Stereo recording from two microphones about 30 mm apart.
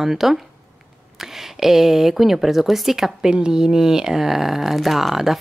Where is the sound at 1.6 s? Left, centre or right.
Centre.